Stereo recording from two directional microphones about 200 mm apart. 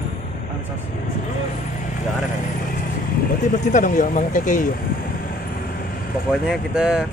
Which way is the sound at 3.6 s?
40° left (ahead or behind).